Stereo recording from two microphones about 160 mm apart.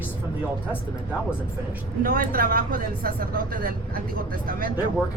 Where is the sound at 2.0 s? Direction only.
65° right (ahead or behind).